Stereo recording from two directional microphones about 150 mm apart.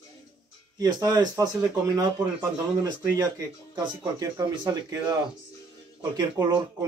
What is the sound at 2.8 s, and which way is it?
Speech, 25° right (ahead or behind).